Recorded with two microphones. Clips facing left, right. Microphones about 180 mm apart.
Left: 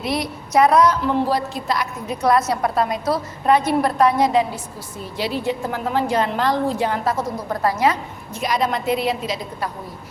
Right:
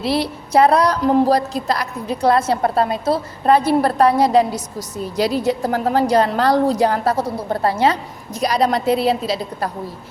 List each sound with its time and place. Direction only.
0.0 s a woman's voice: 30° right (ahead or behind)